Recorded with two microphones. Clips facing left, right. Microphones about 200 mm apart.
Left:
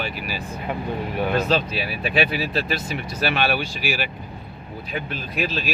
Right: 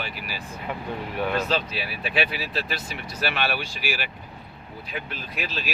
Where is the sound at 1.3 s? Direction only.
45° left (ahead or behind).